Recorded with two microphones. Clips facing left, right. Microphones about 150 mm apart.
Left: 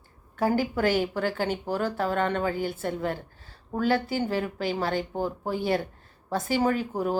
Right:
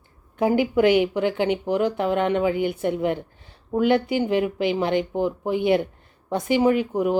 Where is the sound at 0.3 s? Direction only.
15° right (ahead or behind).